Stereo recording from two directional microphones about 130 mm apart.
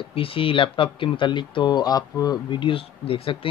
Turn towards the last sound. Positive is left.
turn(degrees=45)  # may be behind; listen again after turning